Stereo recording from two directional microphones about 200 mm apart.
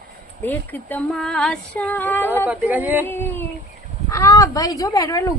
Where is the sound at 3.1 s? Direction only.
10° left (ahead or behind).